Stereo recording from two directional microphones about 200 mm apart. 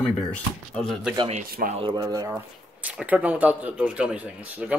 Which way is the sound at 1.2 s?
30° right (ahead or behind).